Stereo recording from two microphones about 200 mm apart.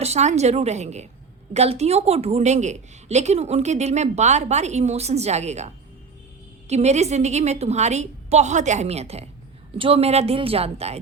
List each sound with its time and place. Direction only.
0.0 s a woman's voice: 35° right (ahead or behind)